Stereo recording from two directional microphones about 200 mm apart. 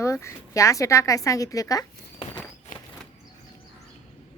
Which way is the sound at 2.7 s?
45° left (ahead or behind).